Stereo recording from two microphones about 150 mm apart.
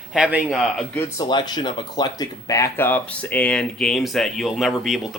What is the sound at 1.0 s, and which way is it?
Speech, 25° left (ahead or behind).